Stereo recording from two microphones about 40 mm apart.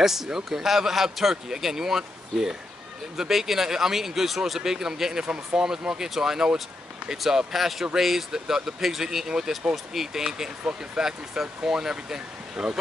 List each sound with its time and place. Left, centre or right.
0.0 s a man's voice: centre